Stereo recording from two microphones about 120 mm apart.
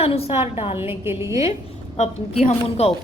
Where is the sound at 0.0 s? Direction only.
55° left (ahead or behind).